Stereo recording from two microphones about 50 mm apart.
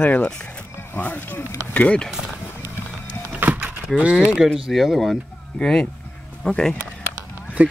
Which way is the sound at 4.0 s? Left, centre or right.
Right.